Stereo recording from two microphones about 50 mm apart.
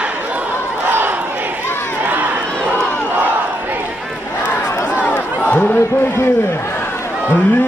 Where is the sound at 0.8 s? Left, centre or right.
Right.